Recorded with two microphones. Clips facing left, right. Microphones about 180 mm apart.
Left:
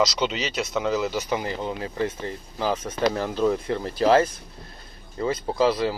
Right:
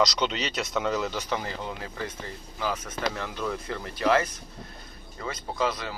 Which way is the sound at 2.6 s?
30° left (ahead or behind).